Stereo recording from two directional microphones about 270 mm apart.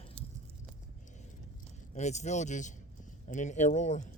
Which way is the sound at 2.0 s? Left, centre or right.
Left.